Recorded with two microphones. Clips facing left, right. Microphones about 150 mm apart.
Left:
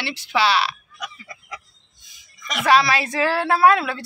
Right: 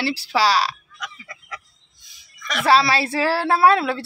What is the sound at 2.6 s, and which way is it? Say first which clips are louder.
Speech: even; 30° right (ahead or behind).